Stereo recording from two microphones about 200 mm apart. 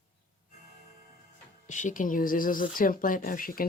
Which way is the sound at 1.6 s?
40° left (ahead or behind).